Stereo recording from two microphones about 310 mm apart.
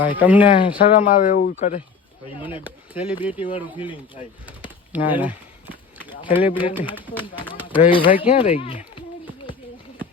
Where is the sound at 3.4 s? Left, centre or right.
Centre.